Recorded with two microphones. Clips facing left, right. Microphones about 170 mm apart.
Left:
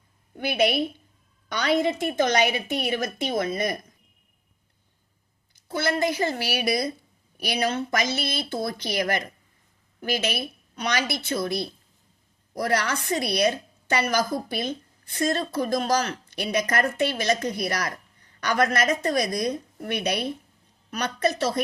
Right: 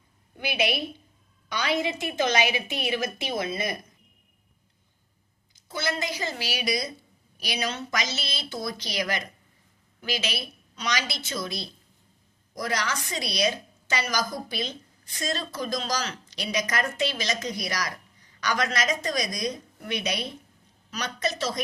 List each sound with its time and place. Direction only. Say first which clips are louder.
0.3 s a woman's voice: left 5 dB; 50° left (ahead or behind)
5.5 s a woman's voice: left 5 dB; 55° left (ahead or behind)